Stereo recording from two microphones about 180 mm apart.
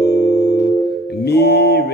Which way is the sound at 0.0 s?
65° left (ahead or behind).